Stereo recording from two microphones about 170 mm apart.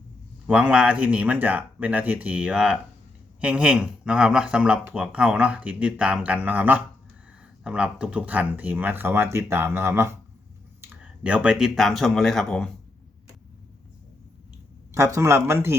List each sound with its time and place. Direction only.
0.4 s speech: 5° right (ahead or behind)
14.9 s speech: 15° right (ahead or behind)